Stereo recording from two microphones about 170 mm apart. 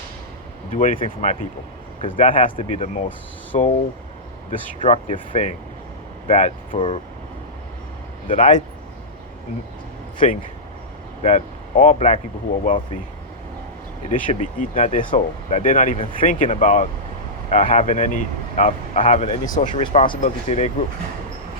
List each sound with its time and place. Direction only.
0.7 s speech: 50° left (ahead or behind)
6.7 s speech: 35° left (ahead or behind)
8.4 s speech: 45° left (ahead or behind)
10.2 s speech: 45° left (ahead or behind)
14.1 s speech: 50° left (ahead or behind)
19.6 s speech: 30° left (ahead or behind)